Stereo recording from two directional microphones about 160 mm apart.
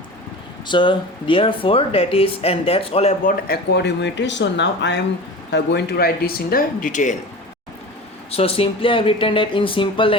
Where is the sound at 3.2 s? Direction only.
85° left; by 7.2 s 50° left (ahead or behind).